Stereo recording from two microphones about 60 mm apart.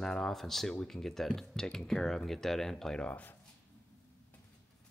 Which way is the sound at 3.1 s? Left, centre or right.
Left.